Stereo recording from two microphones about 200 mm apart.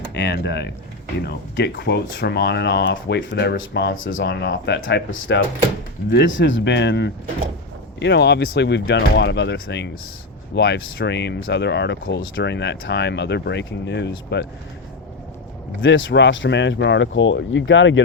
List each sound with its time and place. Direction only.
0.1 s speech: 55° left (ahead or behind)
15.8 s speech: 65° left (ahead or behind)